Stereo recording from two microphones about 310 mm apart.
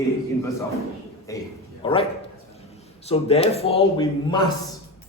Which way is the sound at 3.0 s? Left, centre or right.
Centre.